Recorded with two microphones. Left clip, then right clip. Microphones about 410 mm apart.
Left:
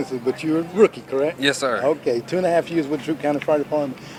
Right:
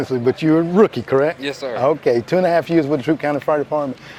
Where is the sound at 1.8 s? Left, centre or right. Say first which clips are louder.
Right 4 dB; right.